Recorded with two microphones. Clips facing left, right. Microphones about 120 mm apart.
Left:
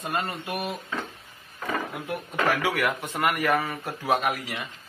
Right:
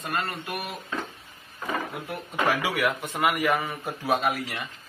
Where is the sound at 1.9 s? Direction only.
Centre (ahead or behind).